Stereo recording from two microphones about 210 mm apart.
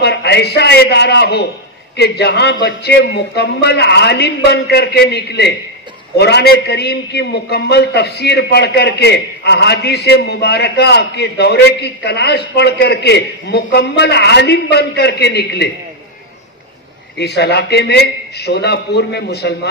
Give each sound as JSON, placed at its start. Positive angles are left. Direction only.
{"t": 0.0, "sound": "a man's voice", "side_deg": 50}
{"t": 17.2, "sound": "a man's voice", "side_deg": 50}